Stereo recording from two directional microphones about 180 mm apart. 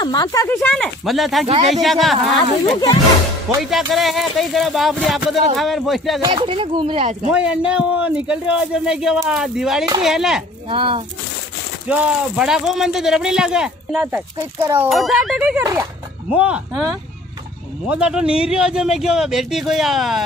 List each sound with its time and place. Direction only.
0.0 s speech: 20° left (ahead or behind)
0.6 s speech: 5° left (ahead or behind)
3.7 s speech: centre (ahead or behind)
6.2 s speech: 30° right (ahead or behind)
7.2 s speech: 5° right (ahead or behind)
10.7 s speech: 30° right (ahead or behind)
11.9 s speech: 5° right (ahead or behind)
14.9 s speech: centre (ahead or behind); by 15.9 s 15° right (ahead or behind)
16.3 s speech: 5° right (ahead or behind)